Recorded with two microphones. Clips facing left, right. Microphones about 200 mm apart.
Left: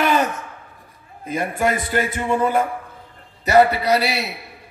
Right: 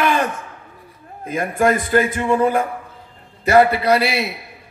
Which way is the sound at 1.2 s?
50° right (ahead or behind).